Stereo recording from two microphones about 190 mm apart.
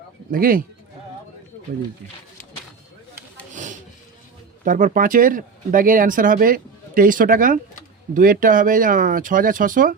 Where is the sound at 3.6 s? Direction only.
40° right (ahead or behind).